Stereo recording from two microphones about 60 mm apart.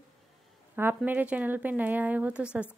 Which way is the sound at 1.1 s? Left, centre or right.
Right.